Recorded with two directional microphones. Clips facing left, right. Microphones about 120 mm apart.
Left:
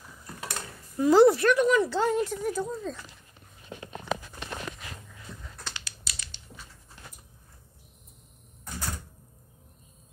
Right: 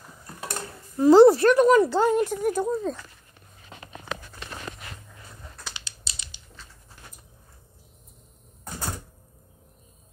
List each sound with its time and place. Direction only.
0.9 s a woman's voice: 30° right (ahead or behind); by 3.0 s 45° right (ahead or behind)
5.3 s a sound: 5° right (ahead or behind)
5.9 s typing: 25° right (ahead or behind)